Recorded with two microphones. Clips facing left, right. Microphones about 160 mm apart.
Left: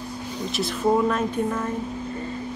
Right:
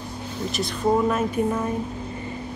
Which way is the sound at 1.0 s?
10° right (ahead or behind).